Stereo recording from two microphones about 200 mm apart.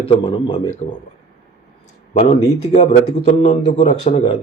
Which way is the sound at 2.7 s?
35° left (ahead or behind).